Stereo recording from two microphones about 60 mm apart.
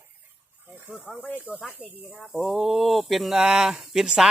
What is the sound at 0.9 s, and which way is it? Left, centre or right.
Speech, centre.